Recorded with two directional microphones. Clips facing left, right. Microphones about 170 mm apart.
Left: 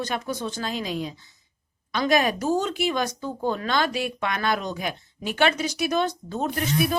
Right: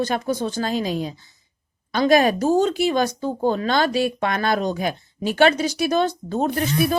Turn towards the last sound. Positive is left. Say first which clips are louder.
# right 4 dB
turn(degrees=-35)  # may be behind; listen again after turning